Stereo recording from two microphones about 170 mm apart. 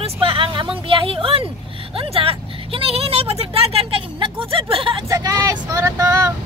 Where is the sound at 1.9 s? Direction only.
30° right (ahead or behind).